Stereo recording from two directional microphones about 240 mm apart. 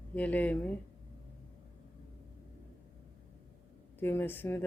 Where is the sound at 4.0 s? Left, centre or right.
Centre.